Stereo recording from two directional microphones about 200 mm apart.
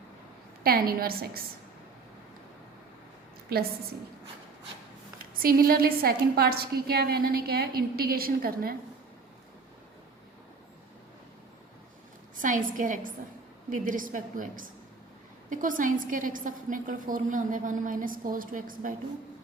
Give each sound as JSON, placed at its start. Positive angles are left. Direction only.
{"t": 0.6, "sound": "a woman's voice", "side_deg": -50}
{"t": 3.5, "sound": "a woman's voice", "side_deg": -50}
{"t": 5.2, "sound": "a woman's voice", "side_deg": -45}
{"t": 12.4, "sound": "a woman's voice", "side_deg": -40}